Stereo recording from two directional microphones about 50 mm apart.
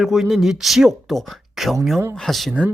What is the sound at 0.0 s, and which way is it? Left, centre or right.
Speech, centre.